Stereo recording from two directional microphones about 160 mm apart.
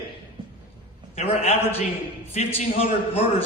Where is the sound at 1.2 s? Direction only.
45° left (ahead or behind).